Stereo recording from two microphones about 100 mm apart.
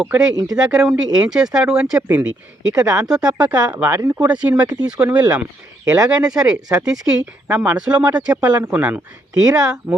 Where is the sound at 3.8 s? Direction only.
30° right (ahead or behind).